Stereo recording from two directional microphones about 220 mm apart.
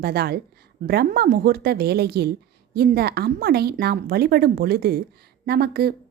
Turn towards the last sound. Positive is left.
turn(degrees=-45)  # may be behind; listen again after turning